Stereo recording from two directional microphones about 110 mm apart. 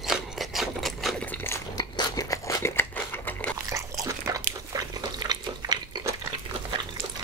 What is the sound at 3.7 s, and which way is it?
Biting, 30° right (ahead or behind).